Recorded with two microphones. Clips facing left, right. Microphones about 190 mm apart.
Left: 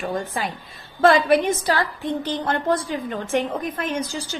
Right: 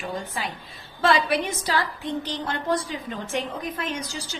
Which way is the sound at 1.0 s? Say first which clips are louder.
Left 6 dB; 50° left (ahead or behind).